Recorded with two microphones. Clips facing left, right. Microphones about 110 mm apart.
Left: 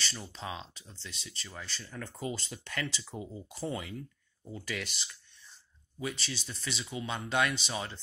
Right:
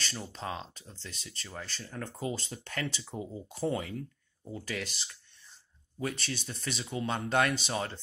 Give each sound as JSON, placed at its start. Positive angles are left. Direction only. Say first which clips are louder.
{"t": 0.0, "sound": "speech", "louder": "right 2 dB", "side_deg": -40}
{"t": 5.9, "sound": "speech", "louder": "right 2 dB", "side_deg": -50}